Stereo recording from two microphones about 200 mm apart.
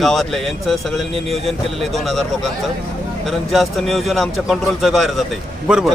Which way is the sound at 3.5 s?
Centre (ahead or behind).